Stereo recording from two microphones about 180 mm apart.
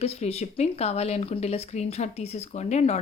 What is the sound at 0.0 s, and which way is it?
Speech, 35° left (ahead or behind).